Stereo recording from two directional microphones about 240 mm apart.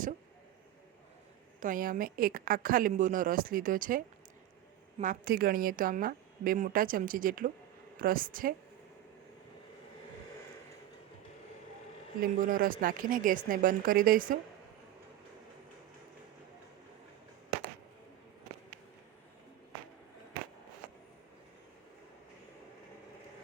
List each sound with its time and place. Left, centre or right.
1.6 s a woman's voice: right
12.2 s a woman's voice: right